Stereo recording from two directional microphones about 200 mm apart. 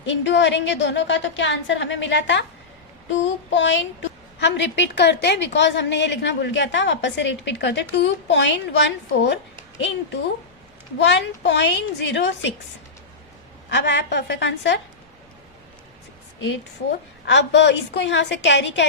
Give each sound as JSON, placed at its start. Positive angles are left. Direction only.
{"t": 0.0, "sound": "a woman's voice", "side_deg": 65}
{"t": 3.1, "sound": "child singing", "side_deg": 65}
{"t": 4.4, "sound": "a woman's voice", "side_deg": 60}
{"t": 11.0, "sound": "a woman's voice", "side_deg": 60}
{"t": 13.7, "sound": "a woman's voice", "side_deg": 60}
{"t": 17.2, "sound": "a woman's voice", "side_deg": 60}